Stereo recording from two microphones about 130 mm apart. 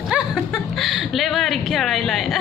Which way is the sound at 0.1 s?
5° right (ahead or behind).